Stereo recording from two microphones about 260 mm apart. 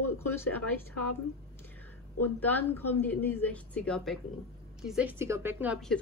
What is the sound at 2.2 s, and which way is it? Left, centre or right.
Speech, centre.